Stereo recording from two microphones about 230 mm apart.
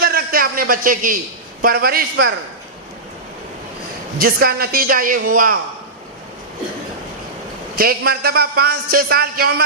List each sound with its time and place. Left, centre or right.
0.0 s a sound: right
1.6 s a man's voice: right
4.2 s a man's voice: right
7.8 s a man's voice: right